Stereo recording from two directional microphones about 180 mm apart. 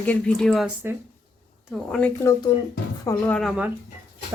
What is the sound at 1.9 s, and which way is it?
A woman's voice, 5° left (ahead or behind).